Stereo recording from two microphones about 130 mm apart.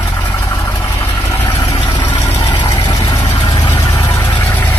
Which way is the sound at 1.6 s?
30° left (ahead or behind).